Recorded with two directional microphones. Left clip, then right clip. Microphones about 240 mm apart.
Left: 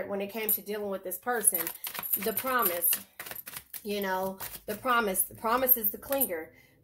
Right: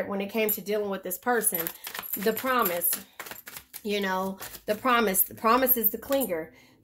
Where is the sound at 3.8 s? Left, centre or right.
Right.